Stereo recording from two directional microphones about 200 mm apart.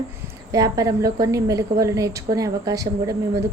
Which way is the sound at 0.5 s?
15° right (ahead or behind).